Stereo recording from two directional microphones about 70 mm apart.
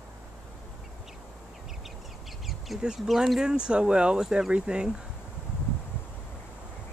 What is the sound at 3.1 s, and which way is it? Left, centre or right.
Speech, centre.